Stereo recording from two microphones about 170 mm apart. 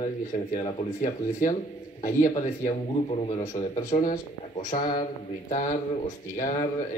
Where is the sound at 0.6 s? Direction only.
50° left (ahead or behind).